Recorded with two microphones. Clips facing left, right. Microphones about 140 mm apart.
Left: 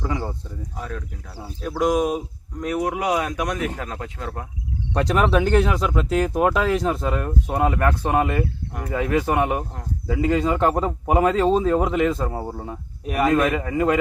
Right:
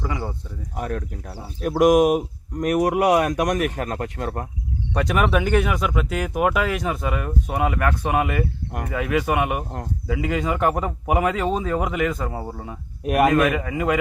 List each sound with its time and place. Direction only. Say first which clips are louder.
0.0 s speech: left 1 dB; centre (ahead or behind)
0.8 s speech: right 6 dB; 55° right (ahead or behind)
1.7 s speech: right 5 dB; 20° right (ahead or behind)
2.8 s speech: right 5 dB; 55° right (ahead or behind)
4.9 s speech: left 1 dB; 5° right (ahead or behind)
13.1 s speech: right 3 dB; 60° right (ahead or behind)
13.4 s speech: left 1 dB; 5° right (ahead or behind)